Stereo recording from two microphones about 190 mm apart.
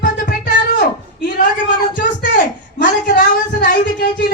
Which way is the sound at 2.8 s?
45° left (ahead or behind).